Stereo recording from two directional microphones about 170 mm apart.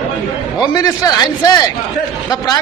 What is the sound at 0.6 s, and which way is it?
A man's voice, 20° left (ahead or behind).